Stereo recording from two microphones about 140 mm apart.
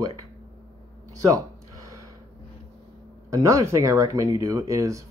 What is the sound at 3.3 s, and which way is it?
Speech, 20° right (ahead or behind).